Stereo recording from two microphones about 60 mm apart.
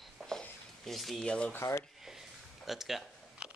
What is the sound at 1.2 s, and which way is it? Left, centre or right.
Speech, centre.